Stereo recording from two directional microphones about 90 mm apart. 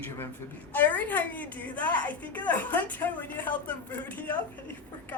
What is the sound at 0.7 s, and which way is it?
A woman's voice, 20° left (ahead or behind).